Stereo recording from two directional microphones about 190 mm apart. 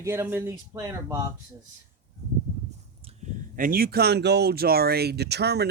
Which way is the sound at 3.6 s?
50° right (ahead or behind).